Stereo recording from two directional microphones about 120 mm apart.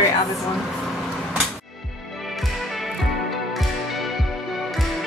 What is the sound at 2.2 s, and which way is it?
Music, centre (ahead or behind).